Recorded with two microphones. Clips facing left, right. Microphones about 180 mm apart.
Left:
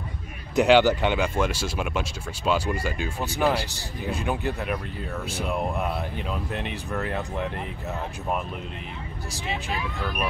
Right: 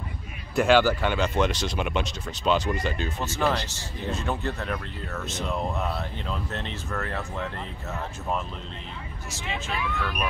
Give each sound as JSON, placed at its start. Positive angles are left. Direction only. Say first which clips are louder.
{"t": 0.6, "sound": "speech", "louder": "left 2 dB", "side_deg": 15}
{"t": 9.7, "sound": "speech", "louder": "even", "side_deg": 35}